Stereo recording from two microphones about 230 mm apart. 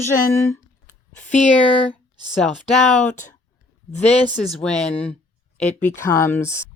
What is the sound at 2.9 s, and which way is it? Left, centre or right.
Speech, left.